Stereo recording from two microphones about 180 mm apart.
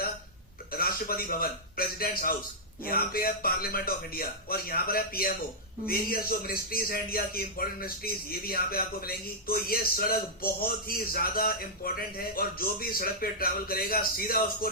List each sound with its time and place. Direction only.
0.7 s a man's voice: 55° left (ahead or behind)